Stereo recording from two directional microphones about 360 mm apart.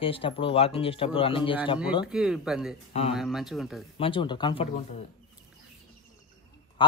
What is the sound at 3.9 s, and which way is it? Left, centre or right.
Speech, centre.